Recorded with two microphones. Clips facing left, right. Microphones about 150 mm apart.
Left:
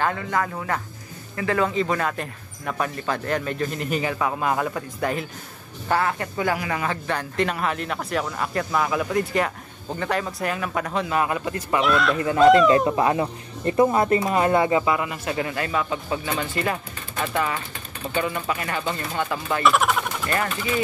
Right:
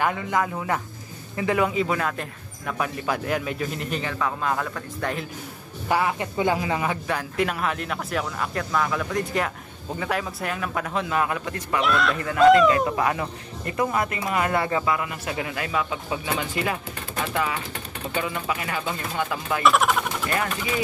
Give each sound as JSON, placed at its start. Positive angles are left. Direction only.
{"t": 0.0, "sound": "a man's voice", "side_deg": -15}
{"t": 5.9, "sound": "speech", "side_deg": -15}
{"t": 7.1, "sound": "a man's voice", "side_deg": -5}
{"t": 12.7, "sound": "speech", "side_deg": 25}
{"t": 14.6, "sound": "a man's voice", "side_deg": 10}
{"t": 15.2, "sound": "a man's voice", "side_deg": -5}